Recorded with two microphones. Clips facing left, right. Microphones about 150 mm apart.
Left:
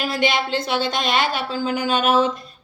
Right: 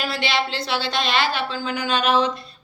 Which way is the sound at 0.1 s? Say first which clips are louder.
Left 3 dB; 45° left (ahead or behind).